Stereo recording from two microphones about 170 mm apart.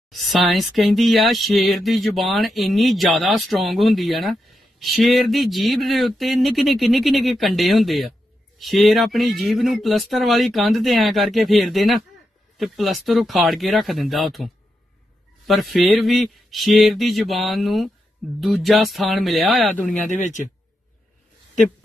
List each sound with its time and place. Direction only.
0.3 s speech: centre (ahead or behind)
20.2 s speech: 45° left (ahead or behind)